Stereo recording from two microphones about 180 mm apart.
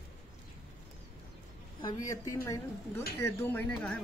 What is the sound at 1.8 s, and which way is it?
Speech, 20° left (ahead or behind).